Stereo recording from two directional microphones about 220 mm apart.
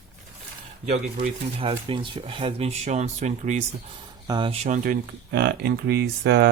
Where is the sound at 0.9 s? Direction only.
30° right (ahead or behind).